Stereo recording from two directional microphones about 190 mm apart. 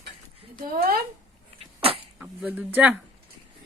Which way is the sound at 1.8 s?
30° right (ahead or behind).